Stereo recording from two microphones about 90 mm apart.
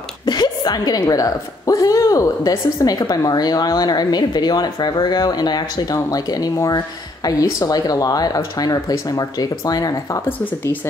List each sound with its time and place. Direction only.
0.2 s a woman's voice: 50° left (ahead or behind)